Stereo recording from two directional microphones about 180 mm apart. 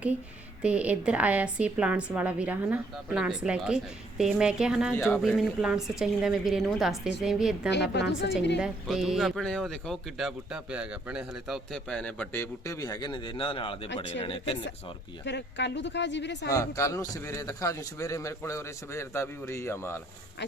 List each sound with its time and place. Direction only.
0.6 s a woman's voice: 5° right (ahead or behind)
4.9 s a man's voice: 15° left (ahead or behind)
5.3 s speech: centre (ahead or behind)
7.7 s speech: 70° left (ahead or behind)
8.5 s speech: 5° right (ahead or behind); by 14.6 s 30° left (ahead or behind)
15.2 s speech: 75° left (ahead or behind)
16.5 s a man's voice: 15° left (ahead or behind)